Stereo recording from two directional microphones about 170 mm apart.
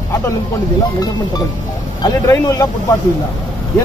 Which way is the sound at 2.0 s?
20° left (ahead or behind).